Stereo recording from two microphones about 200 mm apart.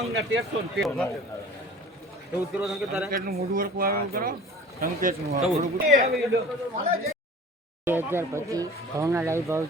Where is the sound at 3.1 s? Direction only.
45° right (ahead or behind).